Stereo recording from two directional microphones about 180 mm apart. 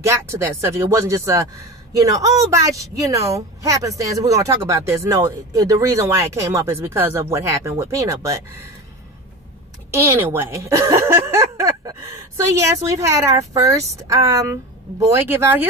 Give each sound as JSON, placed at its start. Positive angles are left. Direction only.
{"t": 0.0, "sound": "a woman's voice", "side_deg": -15}
{"t": 9.8, "sound": "speech", "side_deg": -15}